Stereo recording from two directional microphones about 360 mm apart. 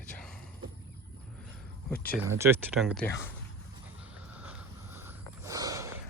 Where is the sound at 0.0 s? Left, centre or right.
Centre.